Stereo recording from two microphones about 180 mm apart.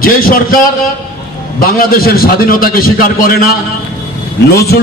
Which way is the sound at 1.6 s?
55° left (ahead or behind).